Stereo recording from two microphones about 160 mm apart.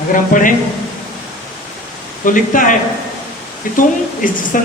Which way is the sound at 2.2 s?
55° left (ahead or behind).